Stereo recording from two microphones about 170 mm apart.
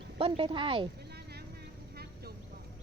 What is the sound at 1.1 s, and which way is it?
Vehicle, 70° right (ahead or behind).